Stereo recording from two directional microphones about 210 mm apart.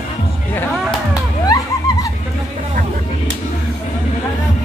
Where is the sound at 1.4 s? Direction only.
15° left (ahead or behind).